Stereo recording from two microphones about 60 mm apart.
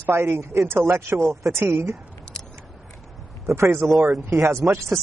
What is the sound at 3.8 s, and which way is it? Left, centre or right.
Speech, centre.